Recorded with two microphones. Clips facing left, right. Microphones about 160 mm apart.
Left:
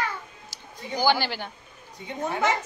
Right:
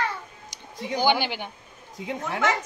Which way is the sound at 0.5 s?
20° right (ahead or behind).